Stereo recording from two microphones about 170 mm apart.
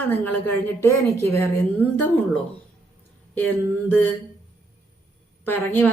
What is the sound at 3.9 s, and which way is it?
Speech, 10° left (ahead or behind).